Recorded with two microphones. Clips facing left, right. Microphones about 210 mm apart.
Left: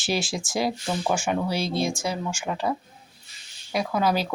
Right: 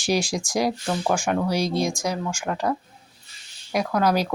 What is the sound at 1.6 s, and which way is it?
Speech, 40° right (ahead or behind).